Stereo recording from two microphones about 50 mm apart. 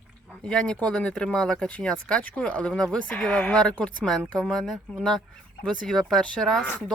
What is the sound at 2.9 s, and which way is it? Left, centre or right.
Speech, left.